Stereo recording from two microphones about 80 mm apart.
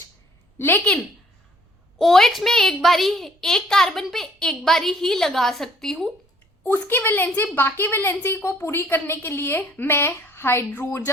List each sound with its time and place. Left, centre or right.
0.6 s a woman's voice: left
2.0 s a child's voice: centre
6.8 s a woman's voice: left